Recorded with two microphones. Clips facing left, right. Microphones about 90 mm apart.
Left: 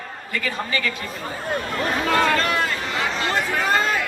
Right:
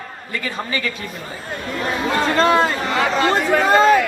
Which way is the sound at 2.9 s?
65° right (ahead or behind).